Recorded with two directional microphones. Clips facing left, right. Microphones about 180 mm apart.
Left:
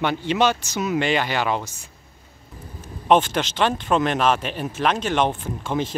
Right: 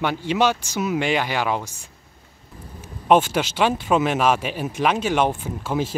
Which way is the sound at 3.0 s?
10° right (ahead or behind).